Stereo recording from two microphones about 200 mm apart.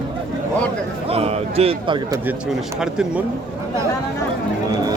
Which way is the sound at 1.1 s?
30° right (ahead or behind).